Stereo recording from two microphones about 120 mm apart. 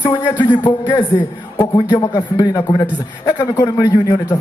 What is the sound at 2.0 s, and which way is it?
A man's voice, 25° left (ahead or behind).